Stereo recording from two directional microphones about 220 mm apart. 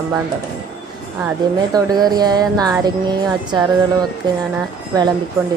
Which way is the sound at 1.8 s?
20° right (ahead or behind).